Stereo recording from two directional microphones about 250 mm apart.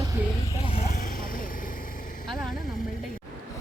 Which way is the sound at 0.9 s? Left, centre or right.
Left.